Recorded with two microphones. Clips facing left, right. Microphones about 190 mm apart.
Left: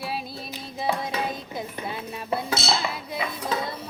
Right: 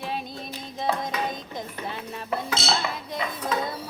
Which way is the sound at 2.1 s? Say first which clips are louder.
Left 2 dB; 10° left (ahead or behind).